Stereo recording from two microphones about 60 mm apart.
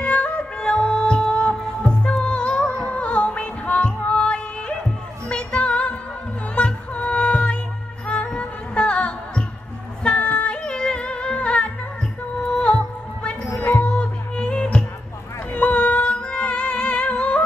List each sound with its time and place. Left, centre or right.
0.0 s music: left